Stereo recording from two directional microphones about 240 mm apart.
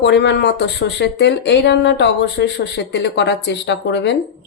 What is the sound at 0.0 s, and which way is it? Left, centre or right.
Speech, left.